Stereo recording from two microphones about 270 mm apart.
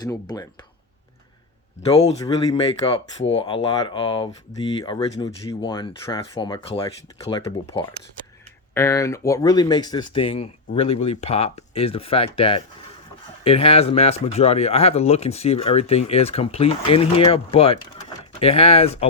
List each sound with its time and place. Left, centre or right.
0.0 s speech: centre
1.8 s speech: centre